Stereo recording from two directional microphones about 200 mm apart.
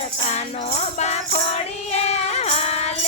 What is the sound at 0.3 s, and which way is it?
Music, 35° left (ahead or behind).